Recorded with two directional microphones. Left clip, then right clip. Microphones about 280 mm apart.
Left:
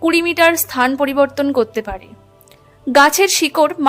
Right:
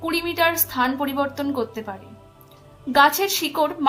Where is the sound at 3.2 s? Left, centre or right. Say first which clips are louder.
Left 8 dB; left.